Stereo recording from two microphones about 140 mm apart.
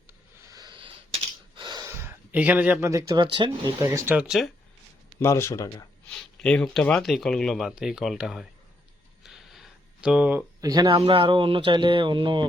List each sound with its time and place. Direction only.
0.1 s a sound: 25° right (ahead or behind)
1.5 s gasp: 30° right (ahead or behind)
1.9 s a sound: 15° right (ahead or behind)
2.9 s speech: 25° right (ahead or behind)
4.0 s speech: 10° right (ahead or behind)
5.2 s speech: 20° left (ahead or behind)
6.1 s speech: 5° left (ahead or behind)
9.2 s a sound: centre (ahead or behind)
10.6 s speech: 25° right (ahead or behind)
11.0 s speech: 40° right (ahead or behind)